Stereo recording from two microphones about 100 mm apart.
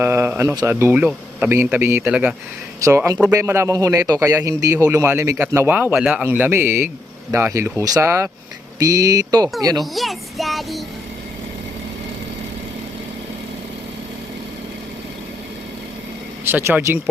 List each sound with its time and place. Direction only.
0.0 s a sound: 25° right (ahead or behind)
0.6 s speech: 25° right (ahead or behind)
2.8 s a man's voice: 30° right (ahead or behind); by 6.2 s 10° right (ahead or behind)
6.2 s a man's voice: 20° right (ahead or behind); by 9.8 s 40° right (ahead or behind)
9.8 s a child's voice: centre (ahead or behind)
16.4 s speech: 20° right (ahead or behind)